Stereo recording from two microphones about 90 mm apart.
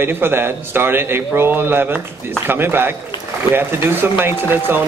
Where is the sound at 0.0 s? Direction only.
25° right (ahead or behind).